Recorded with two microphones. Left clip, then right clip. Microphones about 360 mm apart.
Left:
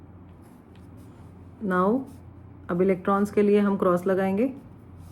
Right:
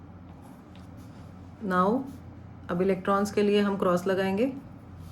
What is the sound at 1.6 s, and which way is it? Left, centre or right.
Speech, centre.